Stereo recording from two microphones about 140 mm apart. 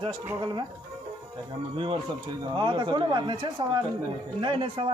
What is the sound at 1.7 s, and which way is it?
A man's voice, 40° right (ahead or behind).